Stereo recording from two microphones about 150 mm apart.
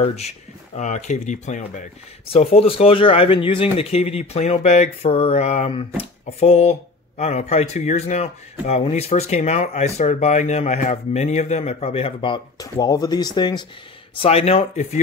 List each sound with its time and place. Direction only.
0.0 s speech: 45° left (ahead or behind)
2.2 s speech: 40° left (ahead or behind)
14.1 s speech: 40° left (ahead or behind)